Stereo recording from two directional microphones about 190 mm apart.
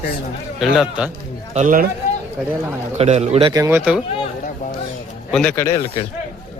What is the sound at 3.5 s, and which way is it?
Speech, 15° right (ahead or behind).